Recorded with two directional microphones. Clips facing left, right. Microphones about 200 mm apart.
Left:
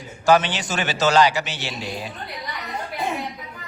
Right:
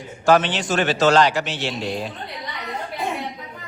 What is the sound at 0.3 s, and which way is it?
A man's voice, centre (ahead or behind).